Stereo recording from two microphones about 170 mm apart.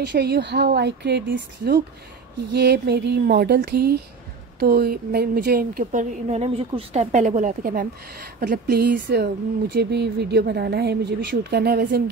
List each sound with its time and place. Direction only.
0.0 s a woman's voice: 75° right (ahead or behind)
2.5 s a woman's voice: 80° right